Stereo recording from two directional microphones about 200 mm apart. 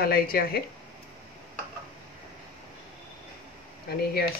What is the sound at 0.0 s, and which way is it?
Speech, 50° left (ahead or behind).